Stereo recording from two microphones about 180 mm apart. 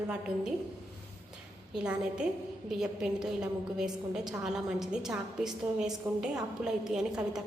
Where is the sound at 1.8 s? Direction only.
5° right (ahead or behind).